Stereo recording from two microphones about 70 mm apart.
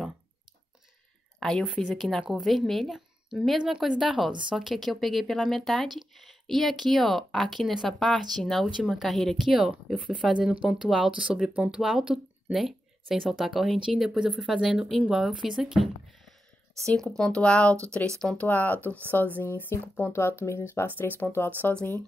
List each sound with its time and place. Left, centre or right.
1.4 s speech: centre
4.6 s speech: centre
9.5 s speech: centre
18.4 s speech: left